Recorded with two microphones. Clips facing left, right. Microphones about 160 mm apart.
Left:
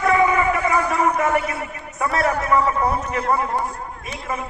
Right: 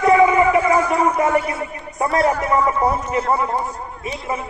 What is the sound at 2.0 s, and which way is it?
Speech, 30° right (ahead or behind).